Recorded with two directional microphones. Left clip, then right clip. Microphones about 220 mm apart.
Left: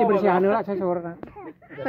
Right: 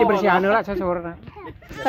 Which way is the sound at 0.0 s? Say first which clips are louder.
Right 2 dB; 30° right (ahead or behind).